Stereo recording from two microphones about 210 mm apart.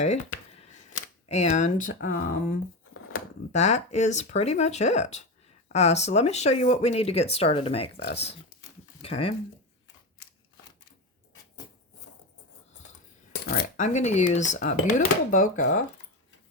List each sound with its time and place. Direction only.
0.0 s speech: 30° left (ahead or behind)
13.4 s speech: 50° left (ahead or behind)